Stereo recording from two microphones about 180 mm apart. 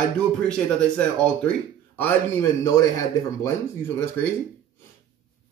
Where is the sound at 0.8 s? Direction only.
5° left (ahead or behind).